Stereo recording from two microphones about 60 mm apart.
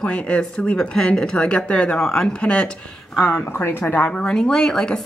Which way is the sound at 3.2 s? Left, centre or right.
Left.